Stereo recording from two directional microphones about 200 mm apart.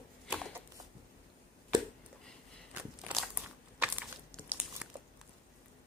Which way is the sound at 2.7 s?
5° right (ahead or behind).